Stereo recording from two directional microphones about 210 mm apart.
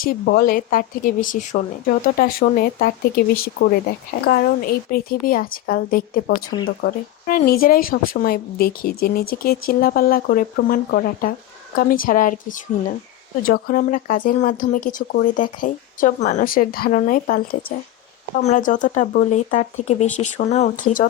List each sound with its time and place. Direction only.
0.0 s speech: 45° left (ahead or behind)